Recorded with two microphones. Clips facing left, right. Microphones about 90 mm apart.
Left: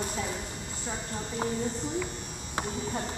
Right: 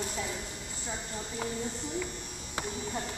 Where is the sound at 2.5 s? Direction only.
35° left (ahead or behind).